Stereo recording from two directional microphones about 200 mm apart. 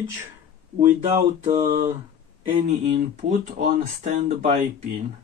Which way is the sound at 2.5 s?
35° right (ahead or behind).